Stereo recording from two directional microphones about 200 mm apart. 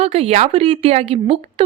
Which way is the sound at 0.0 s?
30° right (ahead or behind).